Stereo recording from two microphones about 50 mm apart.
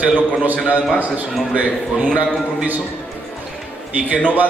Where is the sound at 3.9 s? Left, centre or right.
Right.